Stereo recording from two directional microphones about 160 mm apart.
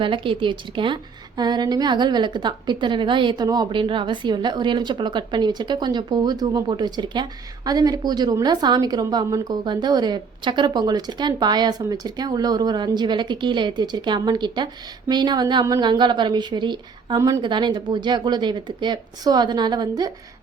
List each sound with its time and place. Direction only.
0.0 s a woman's voice: 30° right (ahead or behind)